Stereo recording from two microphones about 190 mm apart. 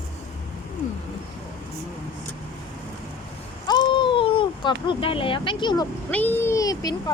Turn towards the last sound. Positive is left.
turn(degrees=20)  # may be behind; listen again after turning